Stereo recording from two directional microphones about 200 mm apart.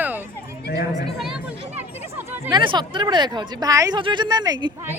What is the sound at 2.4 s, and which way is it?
Speech, 20° right (ahead or behind).